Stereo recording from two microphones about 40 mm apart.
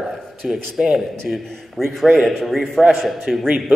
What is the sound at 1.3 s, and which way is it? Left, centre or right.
Speech, right.